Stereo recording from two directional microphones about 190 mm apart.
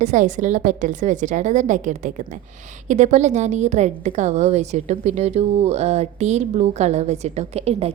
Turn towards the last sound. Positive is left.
turn(degrees=-30)  # may be behind; listen again after turning